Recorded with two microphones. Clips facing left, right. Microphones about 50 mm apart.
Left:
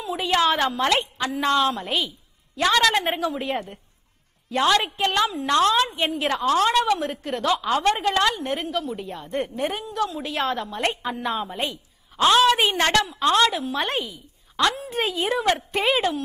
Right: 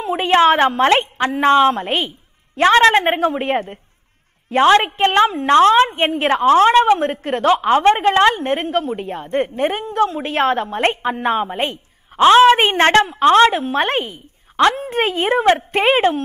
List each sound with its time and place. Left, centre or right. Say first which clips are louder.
0.0 s a woman's voice: right 8 dB; right